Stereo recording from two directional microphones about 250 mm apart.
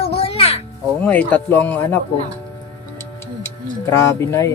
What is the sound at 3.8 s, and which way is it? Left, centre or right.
Speech, centre.